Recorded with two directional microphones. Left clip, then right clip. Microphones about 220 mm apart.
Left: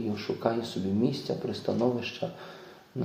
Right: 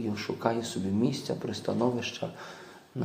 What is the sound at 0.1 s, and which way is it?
Speech, 20° right (ahead or behind).